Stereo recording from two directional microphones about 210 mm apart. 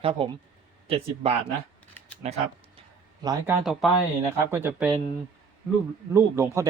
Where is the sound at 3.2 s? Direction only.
10° right (ahead or behind).